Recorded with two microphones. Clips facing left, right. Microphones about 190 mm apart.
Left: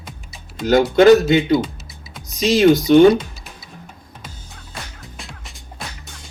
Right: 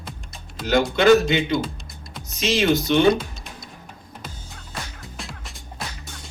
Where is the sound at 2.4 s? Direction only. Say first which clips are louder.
Left 7 dB; 40° left (ahead or behind).